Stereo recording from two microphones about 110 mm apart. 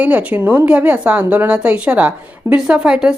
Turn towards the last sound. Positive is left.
turn(degrees=-5)  # may be behind; listen again after turning